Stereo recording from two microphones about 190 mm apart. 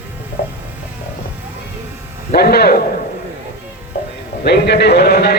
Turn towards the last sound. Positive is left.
turn(degrees=60)  # may be behind; listen again after turning